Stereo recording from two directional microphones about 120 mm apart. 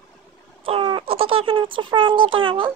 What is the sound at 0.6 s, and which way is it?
Speech, 50° right (ahead or behind).